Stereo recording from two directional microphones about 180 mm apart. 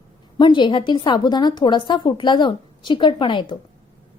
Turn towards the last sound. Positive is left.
turn(degrees=25)  # may be behind; listen again after turning